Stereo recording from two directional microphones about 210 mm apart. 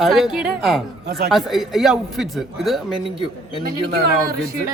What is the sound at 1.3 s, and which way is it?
Speech, centre (ahead or behind).